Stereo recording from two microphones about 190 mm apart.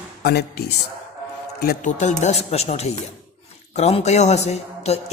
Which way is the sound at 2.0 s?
40° left (ahead or behind).